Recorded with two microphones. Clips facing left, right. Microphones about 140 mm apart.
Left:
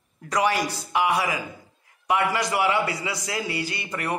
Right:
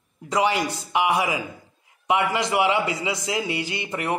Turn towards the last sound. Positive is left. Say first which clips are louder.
# right 2 dB
turn(degrees=-20)  # may be behind; listen again after turning